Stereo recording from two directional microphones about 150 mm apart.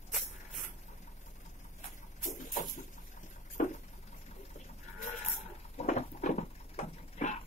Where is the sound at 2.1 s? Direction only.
60° left (ahead or behind).